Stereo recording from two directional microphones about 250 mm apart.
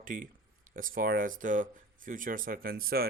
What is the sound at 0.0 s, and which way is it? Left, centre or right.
Speech, right.